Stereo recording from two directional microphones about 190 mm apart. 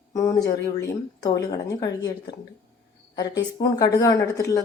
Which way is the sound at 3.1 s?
20° left (ahead or behind).